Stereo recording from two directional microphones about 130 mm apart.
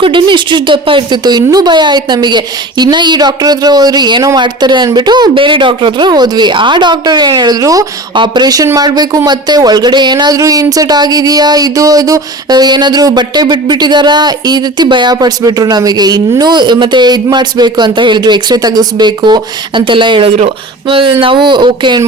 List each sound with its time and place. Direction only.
0.0 s speech: 40° right (ahead or behind)